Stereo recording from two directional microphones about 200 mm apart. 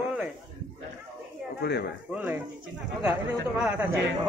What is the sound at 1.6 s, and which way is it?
Speech, 55° left (ahead or behind).